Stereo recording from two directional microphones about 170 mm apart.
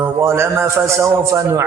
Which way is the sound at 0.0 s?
15° right (ahead or behind).